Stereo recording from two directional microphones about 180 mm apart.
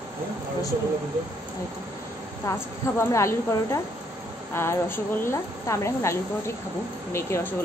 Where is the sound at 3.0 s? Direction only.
15° left (ahead or behind).